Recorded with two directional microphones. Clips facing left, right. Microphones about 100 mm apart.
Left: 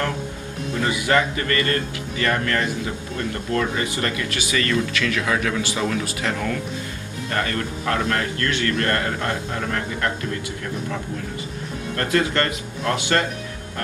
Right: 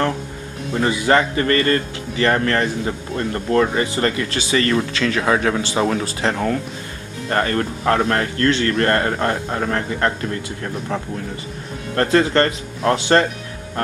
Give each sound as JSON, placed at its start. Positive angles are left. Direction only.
{"t": 0.8, "sound": "speech", "side_deg": -30}
{"t": 12.0, "sound": "speech", "side_deg": -35}